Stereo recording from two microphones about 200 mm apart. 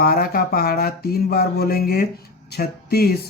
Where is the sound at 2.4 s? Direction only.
50° left (ahead or behind).